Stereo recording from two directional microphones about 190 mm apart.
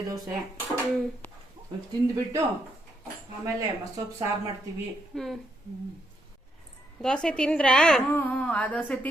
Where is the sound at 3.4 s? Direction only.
15° right (ahead or behind).